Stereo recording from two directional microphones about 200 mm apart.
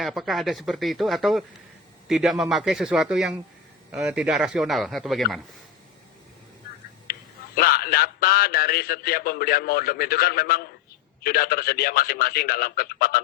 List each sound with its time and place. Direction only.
0.0 s speech: centre (ahead or behind)
7.1 s a man's voice: 50° left (ahead or behind)